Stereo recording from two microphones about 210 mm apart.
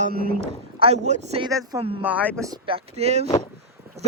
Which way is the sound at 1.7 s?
15° right (ahead or behind).